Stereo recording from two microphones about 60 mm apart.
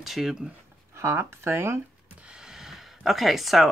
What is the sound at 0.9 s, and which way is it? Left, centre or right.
Speech, right.